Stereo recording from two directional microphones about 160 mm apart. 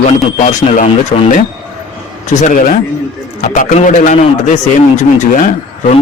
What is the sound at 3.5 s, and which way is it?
Speech, 50° left (ahead or behind).